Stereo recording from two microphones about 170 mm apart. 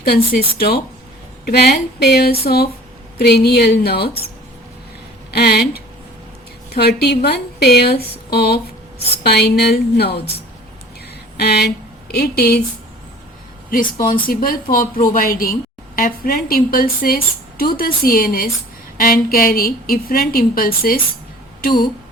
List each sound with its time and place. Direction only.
0.0 s a woman's voice: 65° left (ahead or behind)
5.3 s speech: 70° left (ahead or behind)
10.1 s speech: 35° left (ahead or behind)
11.3 s a sound: 70° left (ahead or behind)
13.7 s a woman's voice: 55° left (ahead or behind)